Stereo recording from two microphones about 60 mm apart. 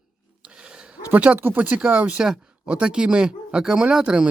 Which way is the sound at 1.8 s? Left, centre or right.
Centre.